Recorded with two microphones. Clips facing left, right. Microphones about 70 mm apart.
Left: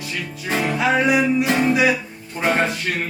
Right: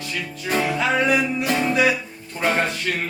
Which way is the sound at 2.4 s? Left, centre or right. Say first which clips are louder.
Left 2 dB; centre.